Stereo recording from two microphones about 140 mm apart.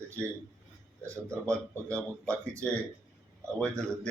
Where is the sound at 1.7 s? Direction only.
10° left (ahead or behind).